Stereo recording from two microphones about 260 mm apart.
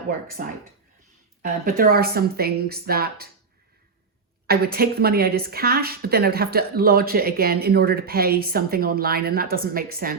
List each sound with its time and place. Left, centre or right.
0.4 s a woman's voice: right
4.4 s a woman's voice: right